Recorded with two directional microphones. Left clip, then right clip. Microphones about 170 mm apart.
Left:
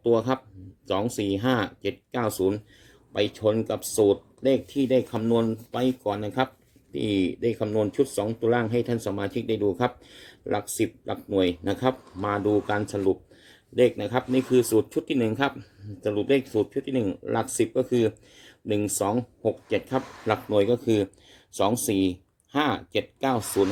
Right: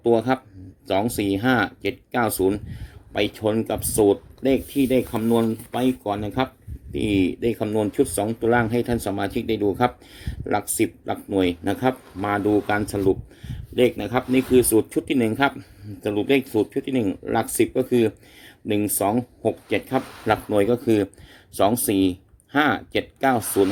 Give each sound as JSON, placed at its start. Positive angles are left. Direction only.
{"t": 0.0, "sound": "speech", "side_deg": -10}